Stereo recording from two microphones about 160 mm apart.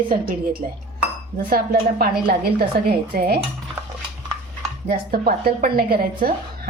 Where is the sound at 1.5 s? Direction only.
65° right (ahead or behind).